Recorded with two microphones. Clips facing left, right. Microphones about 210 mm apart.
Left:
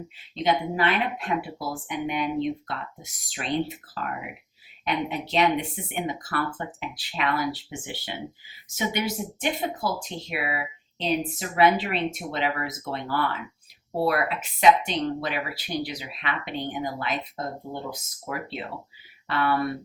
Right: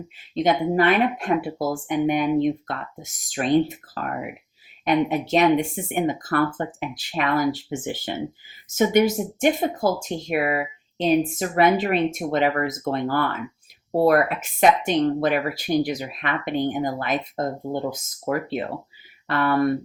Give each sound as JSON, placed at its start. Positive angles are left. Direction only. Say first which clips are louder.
{"t": 0.4, "sound": "speech", "louder": "right 5 dB", "side_deg": -45}